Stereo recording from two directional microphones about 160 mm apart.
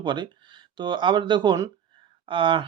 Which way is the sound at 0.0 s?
30° right (ahead or behind).